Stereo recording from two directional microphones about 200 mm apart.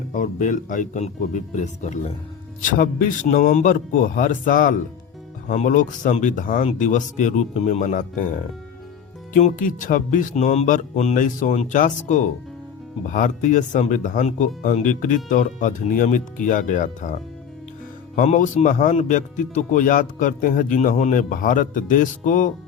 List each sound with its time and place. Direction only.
0.1 s speech: 40° left (ahead or behind)
18.2 s speech: 40° left (ahead or behind)